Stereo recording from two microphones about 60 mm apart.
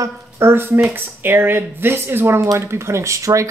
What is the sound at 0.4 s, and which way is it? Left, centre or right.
Speech, right.